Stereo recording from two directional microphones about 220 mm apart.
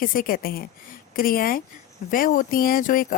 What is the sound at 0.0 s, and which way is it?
Speech, 40° left (ahead or behind).